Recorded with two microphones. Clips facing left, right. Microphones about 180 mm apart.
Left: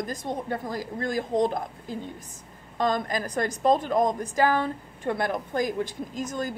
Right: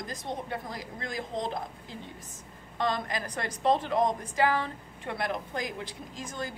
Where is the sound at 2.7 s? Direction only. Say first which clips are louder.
Left 5 dB; 45° left (ahead or behind).